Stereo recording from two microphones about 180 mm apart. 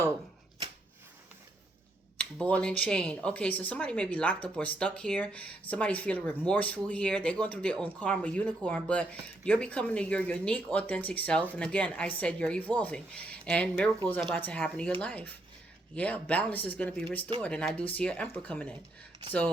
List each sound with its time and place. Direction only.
2.1 s speech: 5° left (ahead or behind)